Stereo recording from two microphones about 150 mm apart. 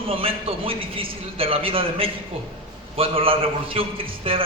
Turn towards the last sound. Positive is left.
turn(degrees=-35)  # may be behind; listen again after turning